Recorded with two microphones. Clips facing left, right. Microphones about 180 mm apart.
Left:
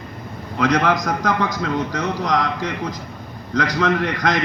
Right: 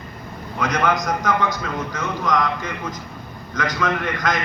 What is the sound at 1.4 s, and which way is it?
A man's voice, 80° left.